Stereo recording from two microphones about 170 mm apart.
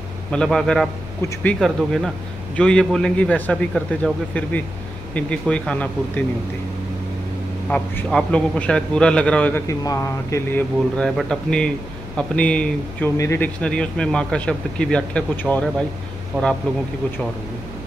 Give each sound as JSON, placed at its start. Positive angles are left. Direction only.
{"t": 0.3, "sound": "a man's voice", "side_deg": 5}
{"t": 7.7, "sound": "speech", "side_deg": 5}
{"t": 9.7, "sound": "a man's voice", "side_deg": 20}
{"t": 11.0, "sound": "a man's voice", "side_deg": 5}